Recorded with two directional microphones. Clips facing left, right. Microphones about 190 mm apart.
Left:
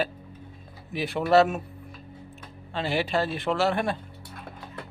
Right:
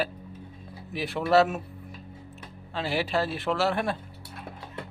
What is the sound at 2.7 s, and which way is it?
A man's voice, 5° right (ahead or behind).